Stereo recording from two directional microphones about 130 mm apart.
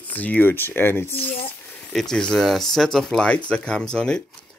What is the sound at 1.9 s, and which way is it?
Speech, 5° left (ahead or behind).